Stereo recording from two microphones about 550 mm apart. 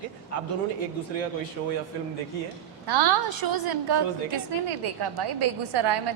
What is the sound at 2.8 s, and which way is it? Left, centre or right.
A woman's voice, right.